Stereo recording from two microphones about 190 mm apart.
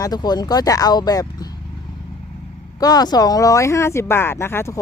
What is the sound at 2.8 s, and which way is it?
Speech, 20° left (ahead or behind).